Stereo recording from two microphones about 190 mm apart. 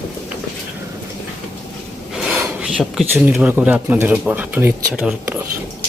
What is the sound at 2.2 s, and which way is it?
Speech, 5° right (ahead or behind).